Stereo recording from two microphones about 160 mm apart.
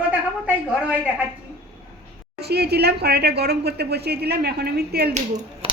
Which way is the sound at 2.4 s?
90° right.